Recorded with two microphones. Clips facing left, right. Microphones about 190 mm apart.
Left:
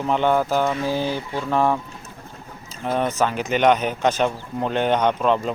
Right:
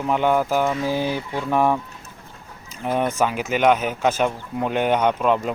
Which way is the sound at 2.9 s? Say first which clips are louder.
Even; 10° right (ahead or behind).